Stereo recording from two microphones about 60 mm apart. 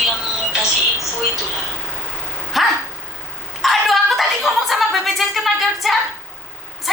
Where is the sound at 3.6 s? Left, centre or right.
Centre.